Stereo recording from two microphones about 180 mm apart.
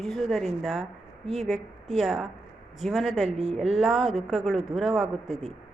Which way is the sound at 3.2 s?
40° right (ahead or behind).